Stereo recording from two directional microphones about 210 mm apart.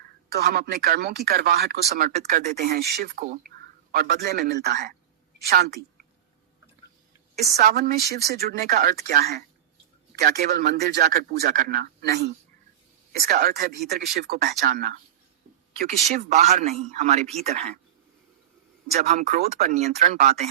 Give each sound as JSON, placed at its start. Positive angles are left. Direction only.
{"t": 0.3, "sound": "speech", "side_deg": -50}
{"t": 7.5, "sound": "speech", "side_deg": -50}
{"t": 18.9, "sound": "speech", "side_deg": -30}
{"t": 20.0, "sound": "speech", "side_deg": -45}